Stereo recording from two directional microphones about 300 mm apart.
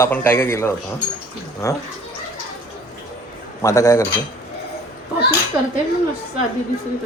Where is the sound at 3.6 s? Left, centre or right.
Centre.